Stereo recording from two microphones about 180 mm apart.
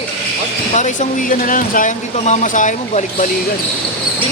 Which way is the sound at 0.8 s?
45° left (ahead or behind).